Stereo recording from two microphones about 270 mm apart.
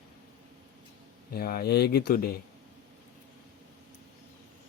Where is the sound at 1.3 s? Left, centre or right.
Left.